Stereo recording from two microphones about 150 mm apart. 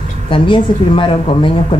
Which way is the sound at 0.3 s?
35° left (ahead or behind).